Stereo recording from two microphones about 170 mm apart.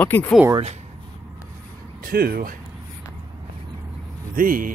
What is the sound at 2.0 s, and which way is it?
Speech, 60° right (ahead or behind).